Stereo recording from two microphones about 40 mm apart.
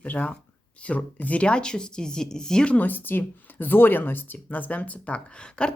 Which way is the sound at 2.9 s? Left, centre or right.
Left.